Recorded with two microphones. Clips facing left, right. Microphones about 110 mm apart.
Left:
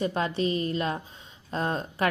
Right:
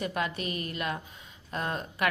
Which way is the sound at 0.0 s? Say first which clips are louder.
Left 5 dB; 30° left (ahead or behind).